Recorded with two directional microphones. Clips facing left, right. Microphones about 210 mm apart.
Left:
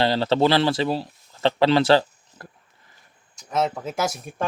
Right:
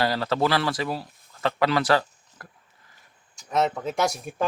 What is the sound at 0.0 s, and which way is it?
Speech, 25° left (ahead or behind).